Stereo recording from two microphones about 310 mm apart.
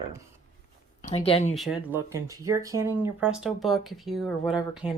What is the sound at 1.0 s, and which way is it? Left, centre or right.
Speech, centre.